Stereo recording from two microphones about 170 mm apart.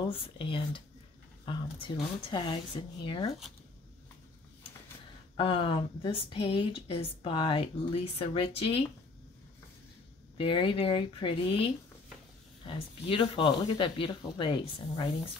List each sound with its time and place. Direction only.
0.0 s speech: 30° left (ahead or behind)
5.3 s speech: 30° left (ahead or behind)
10.3 s speech: 30° left (ahead or behind)